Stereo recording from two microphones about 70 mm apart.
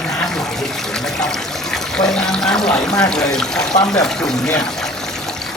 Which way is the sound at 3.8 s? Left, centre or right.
Centre.